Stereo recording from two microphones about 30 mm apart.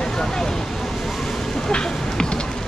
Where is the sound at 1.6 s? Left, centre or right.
Left.